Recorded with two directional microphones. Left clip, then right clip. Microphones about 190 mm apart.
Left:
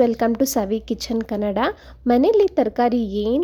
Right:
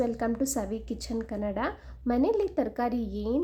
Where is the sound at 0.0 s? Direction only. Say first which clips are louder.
Left 11 dB; 45° left (ahead or behind).